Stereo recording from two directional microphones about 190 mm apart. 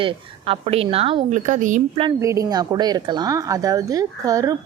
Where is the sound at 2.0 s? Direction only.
20° right (ahead or behind).